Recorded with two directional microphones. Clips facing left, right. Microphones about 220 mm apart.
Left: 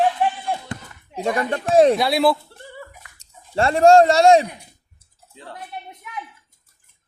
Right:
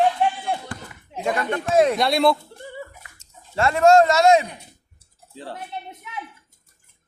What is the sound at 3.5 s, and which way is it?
Speech, 30° left (ahead or behind).